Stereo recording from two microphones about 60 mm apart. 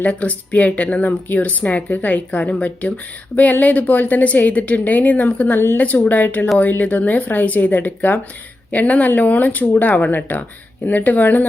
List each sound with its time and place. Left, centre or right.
0.0 s a woman's voice: left